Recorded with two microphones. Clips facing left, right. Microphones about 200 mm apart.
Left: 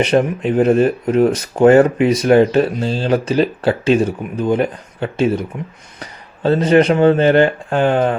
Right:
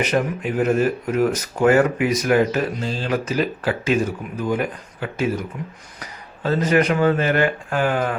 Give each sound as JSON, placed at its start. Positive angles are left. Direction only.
{"t": 0.0, "sound": "speech", "side_deg": 30}